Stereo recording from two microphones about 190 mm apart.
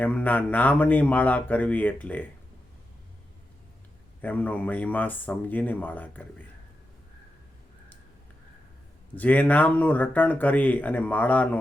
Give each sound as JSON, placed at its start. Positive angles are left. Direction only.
{"t": 0.0, "sound": "speech", "side_deg": 10}
{"t": 4.2, "sound": "speech", "side_deg": 10}
{"t": 9.1, "sound": "speech", "side_deg": 10}